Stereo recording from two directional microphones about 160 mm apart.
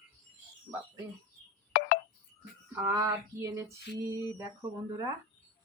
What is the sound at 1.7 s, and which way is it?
Telephone dialing, 70° left (ahead or behind).